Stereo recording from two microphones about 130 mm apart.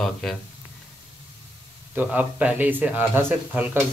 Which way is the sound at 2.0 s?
10° right (ahead or behind).